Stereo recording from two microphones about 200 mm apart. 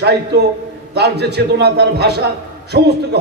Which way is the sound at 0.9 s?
55° right (ahead or behind).